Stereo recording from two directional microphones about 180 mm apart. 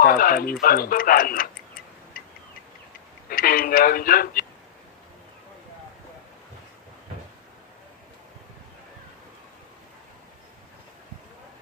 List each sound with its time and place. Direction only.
0.0 s speech: 55° left (ahead or behind)
2.1 s a sound: 50° left (ahead or behind)
3.3 s speech: 55° left (ahead or behind)